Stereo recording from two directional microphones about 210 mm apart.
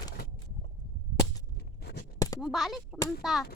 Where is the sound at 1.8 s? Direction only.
50° left (ahead or behind).